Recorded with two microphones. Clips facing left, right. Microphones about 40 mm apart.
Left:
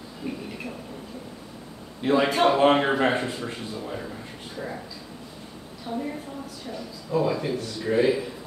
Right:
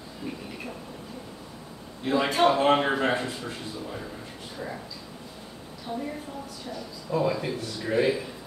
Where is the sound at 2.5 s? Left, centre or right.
Centre.